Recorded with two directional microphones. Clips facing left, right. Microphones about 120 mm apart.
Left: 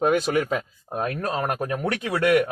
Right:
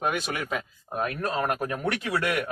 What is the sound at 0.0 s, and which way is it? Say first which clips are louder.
Speech: left 8 dB; 35° left (ahead or behind).